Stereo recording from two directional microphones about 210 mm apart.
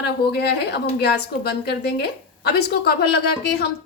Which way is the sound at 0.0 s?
50° left (ahead or behind).